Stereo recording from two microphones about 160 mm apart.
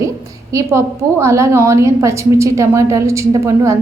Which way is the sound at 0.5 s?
20° right (ahead or behind).